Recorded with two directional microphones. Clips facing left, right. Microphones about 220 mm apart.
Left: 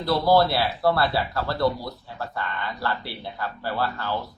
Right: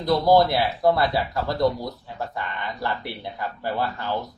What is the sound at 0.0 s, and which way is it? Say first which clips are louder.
Speech: right 2 dB; 20° right (ahead or behind).